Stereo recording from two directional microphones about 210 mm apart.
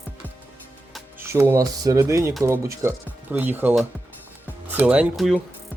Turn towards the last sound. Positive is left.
turn(degrees=-5)  # may be behind; listen again after turning